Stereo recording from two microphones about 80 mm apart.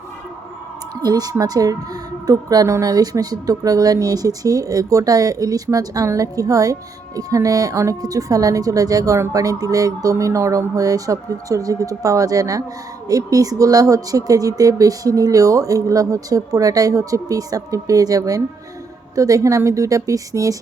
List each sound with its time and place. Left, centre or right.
1.0 s speech: right
2.6 s speech: right
2.9 s speech: right